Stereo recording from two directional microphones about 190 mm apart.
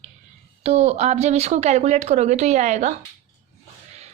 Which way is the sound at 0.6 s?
35° right (ahead or behind).